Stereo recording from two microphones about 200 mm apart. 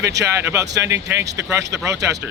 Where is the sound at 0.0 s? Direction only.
15° right (ahead or behind).